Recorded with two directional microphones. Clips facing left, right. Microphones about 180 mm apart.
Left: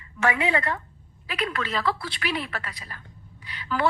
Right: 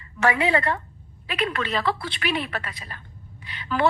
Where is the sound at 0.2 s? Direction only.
35° right (ahead or behind).